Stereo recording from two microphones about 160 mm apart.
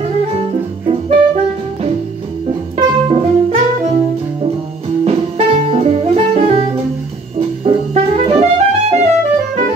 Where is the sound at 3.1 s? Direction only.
40° right (ahead or behind).